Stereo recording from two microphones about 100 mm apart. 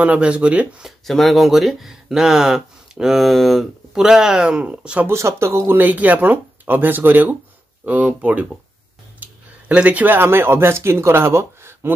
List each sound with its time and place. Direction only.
0.0 s speech: 15° right (ahead or behind)
1.0 s speech: centre (ahead or behind)
5.0 s speech: 25° right (ahead or behind)